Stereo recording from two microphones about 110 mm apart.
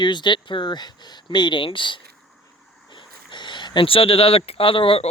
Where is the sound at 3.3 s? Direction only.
45° left (ahead or behind).